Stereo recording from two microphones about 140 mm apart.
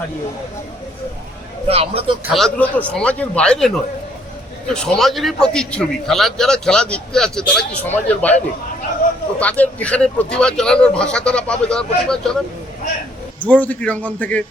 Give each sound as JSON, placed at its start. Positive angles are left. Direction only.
{"t": 1.6, "sound": "speech", "side_deg": -45}
{"t": 2.3, "sound": "speech", "side_deg": 5}
{"t": 4.7, "sound": "a man's voice", "side_deg": 5}
{"t": 9.4, "sound": "speech", "side_deg": 10}
{"t": 13.4, "sound": "speech", "side_deg": 10}